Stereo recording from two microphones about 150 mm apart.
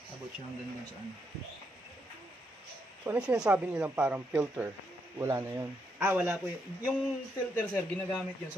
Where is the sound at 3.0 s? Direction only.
10° right (ahead or behind).